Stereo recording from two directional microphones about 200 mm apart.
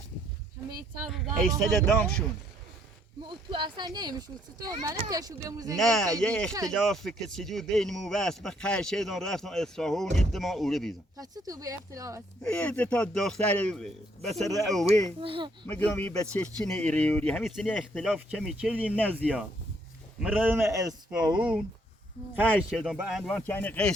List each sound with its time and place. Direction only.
1.0 s speech: centre (ahead or behind)
3.2 s speech: 25° right (ahead or behind)
5.7 s speech: centre (ahead or behind)
6.5 s speech: 15° right (ahead or behind)
6.7 s speech: centre (ahead or behind)
11.2 s speech: 15° right (ahead or behind)
12.5 s speech: 5° left (ahead or behind)
15.2 s speech: 25° right (ahead or behind)
15.6 s speech: 5° left (ahead or behind); by 21.3 s 15° right (ahead or behind)
21.3 s speech: 5° right (ahead or behind)